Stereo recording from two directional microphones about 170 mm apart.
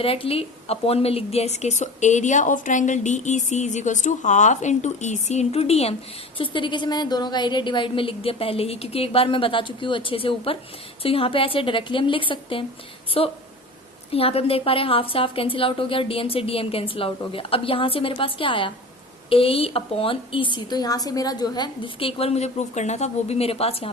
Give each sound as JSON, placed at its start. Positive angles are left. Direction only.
{"t": 0.0, "sound": "a woman's voice", "side_deg": 35}